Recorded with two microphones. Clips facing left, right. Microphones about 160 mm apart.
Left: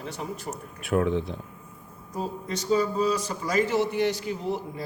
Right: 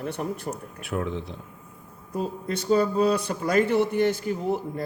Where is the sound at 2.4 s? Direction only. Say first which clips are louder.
Right 2 dB; 55° right (ahead or behind).